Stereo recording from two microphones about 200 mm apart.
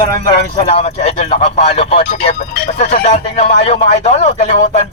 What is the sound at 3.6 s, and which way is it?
Speech, 35° left (ahead or behind).